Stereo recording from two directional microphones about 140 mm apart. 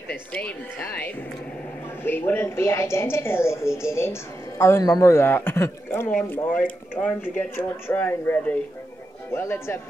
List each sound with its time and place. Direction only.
0.1 s a woman's voice: 10° left (ahead or behind)
2.0 s a woman's voice: 15° left (ahead or behind)